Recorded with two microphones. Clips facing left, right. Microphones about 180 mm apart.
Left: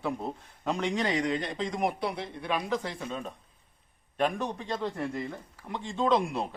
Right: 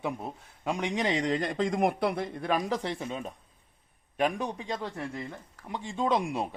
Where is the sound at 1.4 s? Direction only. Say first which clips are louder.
Right 3 dB; 50° right (ahead or behind).